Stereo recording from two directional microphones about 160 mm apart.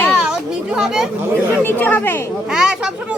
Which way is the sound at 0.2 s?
5° right (ahead or behind).